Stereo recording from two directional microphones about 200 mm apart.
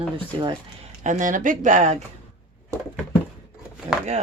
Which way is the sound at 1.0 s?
40° right (ahead or behind).